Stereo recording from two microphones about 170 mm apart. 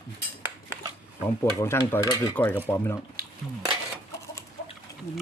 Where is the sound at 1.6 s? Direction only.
15° left (ahead or behind).